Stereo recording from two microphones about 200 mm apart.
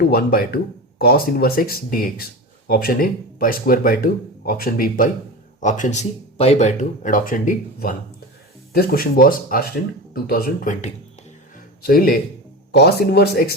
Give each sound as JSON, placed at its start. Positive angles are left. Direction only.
{"t": 0.0, "sound": "speech", "side_deg": 50}